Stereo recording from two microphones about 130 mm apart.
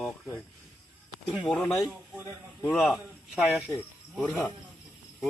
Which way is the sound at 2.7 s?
Centre (ahead or behind).